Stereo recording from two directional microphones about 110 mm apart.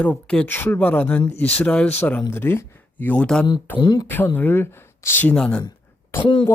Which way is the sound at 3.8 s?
40° left (ahead or behind).